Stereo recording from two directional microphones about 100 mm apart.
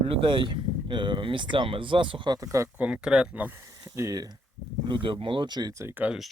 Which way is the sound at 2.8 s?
10° right (ahead or behind).